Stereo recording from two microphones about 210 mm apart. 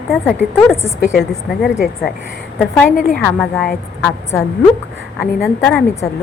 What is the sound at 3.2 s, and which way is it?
A woman's voice, 5° left (ahead or behind).